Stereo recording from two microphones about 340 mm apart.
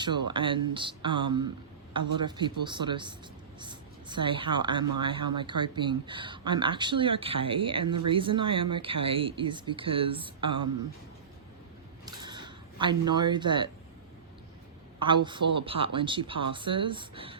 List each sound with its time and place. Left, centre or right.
0.0 s a woman's voice: centre
12.0 s a sound: centre
14.9 s a woman's voice: centre